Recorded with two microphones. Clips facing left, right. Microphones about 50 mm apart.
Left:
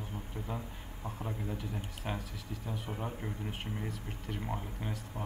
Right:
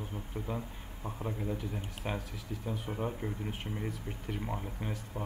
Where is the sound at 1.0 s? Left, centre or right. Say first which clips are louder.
Right 3 dB; centre.